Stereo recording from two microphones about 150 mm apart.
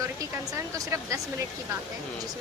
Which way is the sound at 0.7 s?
20° right (ahead or behind).